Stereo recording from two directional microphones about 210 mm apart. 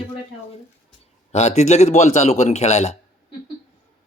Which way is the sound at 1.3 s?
30° left (ahead or behind).